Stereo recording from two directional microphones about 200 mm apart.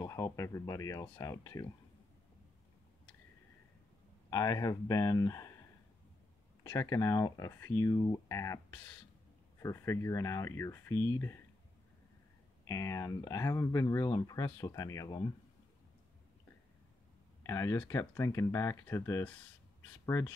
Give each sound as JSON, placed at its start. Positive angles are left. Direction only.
{"t": 0.0, "sound": "speech", "side_deg": 15}
{"t": 4.3, "sound": "speech", "side_deg": 15}
{"t": 6.6, "sound": "speech", "side_deg": 15}
{"t": 12.6, "sound": "speech", "side_deg": 15}
{"t": 17.4, "sound": "speech", "side_deg": 15}